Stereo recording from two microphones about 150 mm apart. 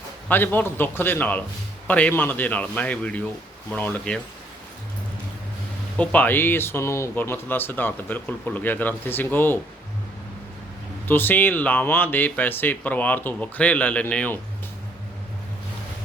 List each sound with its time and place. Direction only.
0.3 s speech: 10° left (ahead or behind)
6.0 s speech: 10° left (ahead or behind)
11.1 s speech: 15° left (ahead or behind)